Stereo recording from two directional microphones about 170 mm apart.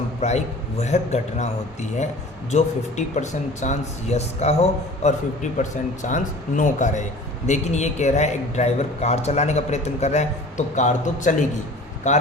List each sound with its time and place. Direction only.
0.2 s a man's voice: 40° left (ahead or behind)